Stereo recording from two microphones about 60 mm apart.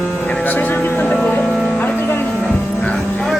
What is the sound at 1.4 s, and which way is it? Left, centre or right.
Music, centre.